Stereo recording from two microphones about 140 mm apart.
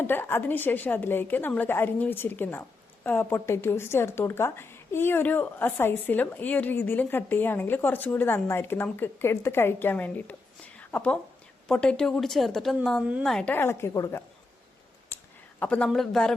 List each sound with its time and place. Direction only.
0.0 s a woman's voice: 15° left (ahead or behind)
10.8 s a sound: 10° left (ahead or behind)
11.7 s a woman's voice: 5° left (ahead or behind)
15.6 s a woman's voice: 10° left (ahead or behind)